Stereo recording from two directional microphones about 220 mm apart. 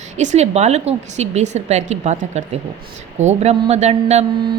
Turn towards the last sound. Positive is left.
turn(degrees=-30)  # may be behind; listen again after turning